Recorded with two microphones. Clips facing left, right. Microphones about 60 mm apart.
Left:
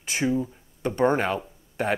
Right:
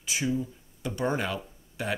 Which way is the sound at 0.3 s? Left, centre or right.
Left.